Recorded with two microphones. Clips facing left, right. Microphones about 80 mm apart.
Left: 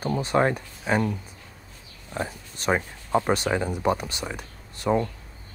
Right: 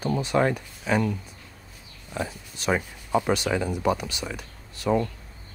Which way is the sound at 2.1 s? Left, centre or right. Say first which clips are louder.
Even; left.